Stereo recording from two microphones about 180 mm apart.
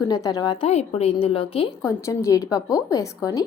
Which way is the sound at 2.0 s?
15° left (ahead or behind).